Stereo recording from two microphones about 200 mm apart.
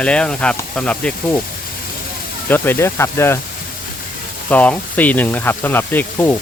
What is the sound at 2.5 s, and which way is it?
Speech, 10° left (ahead or behind).